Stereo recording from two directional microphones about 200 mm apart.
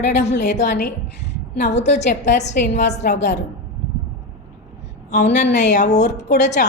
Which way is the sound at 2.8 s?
60° left (ahead or behind).